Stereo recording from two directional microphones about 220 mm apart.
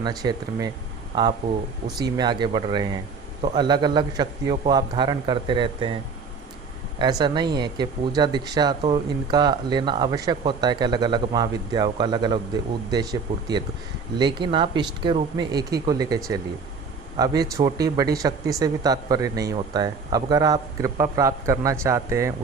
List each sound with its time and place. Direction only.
0.0 s speech: 20° right (ahead or behind)
7.0 s speech: 20° right (ahead or behind)